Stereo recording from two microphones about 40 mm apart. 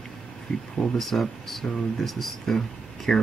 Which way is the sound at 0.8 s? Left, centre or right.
Centre.